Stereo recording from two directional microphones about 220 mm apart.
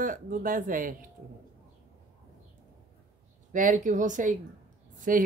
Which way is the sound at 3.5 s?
35° right (ahead or behind).